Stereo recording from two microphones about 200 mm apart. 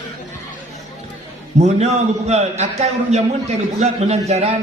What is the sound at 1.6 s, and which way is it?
A man's voice, 35° right (ahead or behind).